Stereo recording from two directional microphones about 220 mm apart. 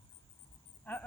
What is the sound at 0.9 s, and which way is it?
Cricket, 5° left (ahead or behind).